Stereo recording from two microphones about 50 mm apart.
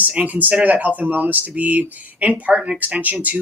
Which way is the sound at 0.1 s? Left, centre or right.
Right.